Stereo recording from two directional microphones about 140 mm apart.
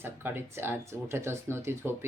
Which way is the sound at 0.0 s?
15° right (ahead or behind).